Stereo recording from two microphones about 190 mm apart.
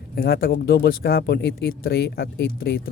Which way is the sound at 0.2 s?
55° left (ahead or behind).